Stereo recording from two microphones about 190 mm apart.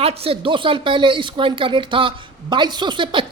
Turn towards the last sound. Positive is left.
turn(degrees=-25)  # may be behind; listen again after turning